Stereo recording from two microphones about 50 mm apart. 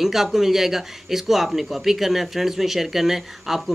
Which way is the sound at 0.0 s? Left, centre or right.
Centre.